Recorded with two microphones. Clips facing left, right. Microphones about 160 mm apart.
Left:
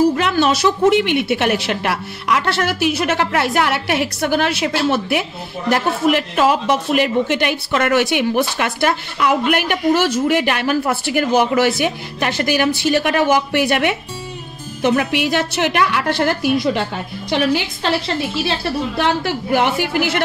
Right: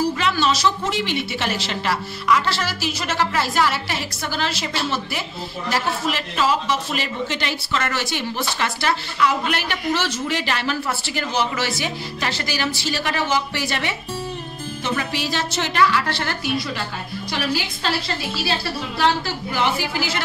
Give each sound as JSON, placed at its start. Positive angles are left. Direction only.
{"t": 0.1, "sound": "a man's voice", "side_deg": 55}
{"t": 18.9, "sound": "a man's voice", "side_deg": 60}